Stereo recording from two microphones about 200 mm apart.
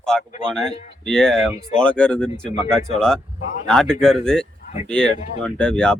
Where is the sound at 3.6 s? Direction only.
5° left (ahead or behind).